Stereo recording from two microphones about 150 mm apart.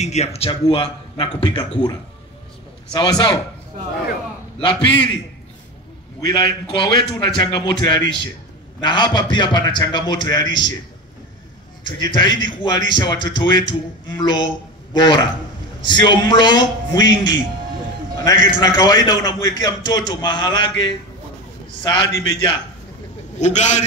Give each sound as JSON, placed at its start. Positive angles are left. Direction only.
{"t": 0.0, "sound": "a man's voice", "side_deg": 45}
{"t": 6.2, "sound": "a man's voice", "side_deg": 30}
{"t": 11.8, "sound": "a man's voice", "side_deg": 30}
{"t": 23.4, "sound": "a man's voice", "side_deg": 50}